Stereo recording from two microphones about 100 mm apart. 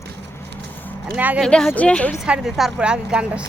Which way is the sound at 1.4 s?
5° left (ahead or behind).